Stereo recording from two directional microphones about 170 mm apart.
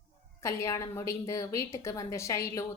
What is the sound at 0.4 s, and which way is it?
A woman's voice, 15° left (ahead or behind).